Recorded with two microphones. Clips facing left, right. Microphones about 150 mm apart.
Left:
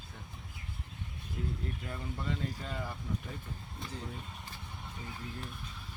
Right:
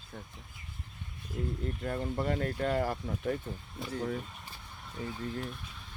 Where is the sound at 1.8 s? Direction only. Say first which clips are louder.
Right 8 dB; 50° right (ahead or behind).